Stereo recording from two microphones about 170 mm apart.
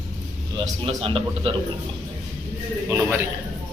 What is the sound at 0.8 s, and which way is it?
Speech, 35° right (ahead or behind).